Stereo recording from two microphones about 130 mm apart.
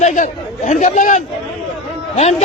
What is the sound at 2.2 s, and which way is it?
Speech, 55° left (ahead or behind).